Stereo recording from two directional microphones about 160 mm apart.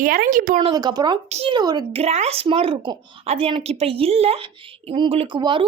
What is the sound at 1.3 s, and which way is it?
Speech, 40° right (ahead or behind).